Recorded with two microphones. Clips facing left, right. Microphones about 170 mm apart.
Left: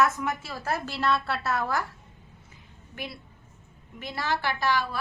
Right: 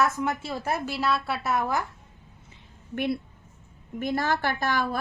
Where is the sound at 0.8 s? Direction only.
5° right (ahead or behind).